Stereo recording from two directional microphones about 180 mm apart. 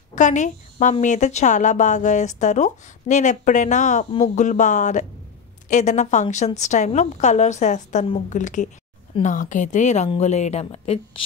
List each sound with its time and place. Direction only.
0.1 s a woman's voice: 40° left (ahead or behind)